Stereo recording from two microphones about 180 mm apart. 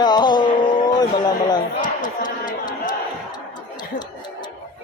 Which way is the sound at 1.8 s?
45° left (ahead or behind).